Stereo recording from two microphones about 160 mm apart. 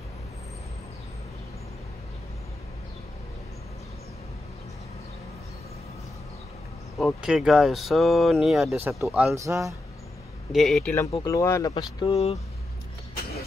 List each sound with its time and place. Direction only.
7.0 s speech: centre (ahead or behind)
9.3 s speech: 15° right (ahead or behind)
10.5 s speech: centre (ahead or behind); by 11.7 s 20° left (ahead or behind)
12.1 s speech: 40° left (ahead or behind)